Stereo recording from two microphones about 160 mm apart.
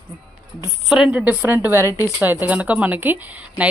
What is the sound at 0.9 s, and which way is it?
Speech, 5° right (ahead or behind).